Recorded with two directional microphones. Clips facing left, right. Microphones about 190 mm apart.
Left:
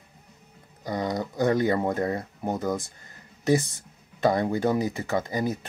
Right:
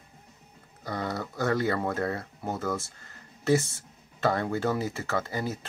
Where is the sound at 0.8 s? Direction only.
15° left (ahead or behind).